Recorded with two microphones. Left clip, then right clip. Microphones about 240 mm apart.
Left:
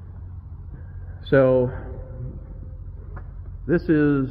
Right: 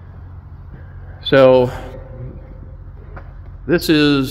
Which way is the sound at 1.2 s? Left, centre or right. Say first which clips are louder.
Right 8 dB; centre.